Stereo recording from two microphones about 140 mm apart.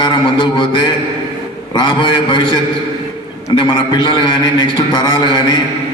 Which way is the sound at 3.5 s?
35° left (ahead or behind).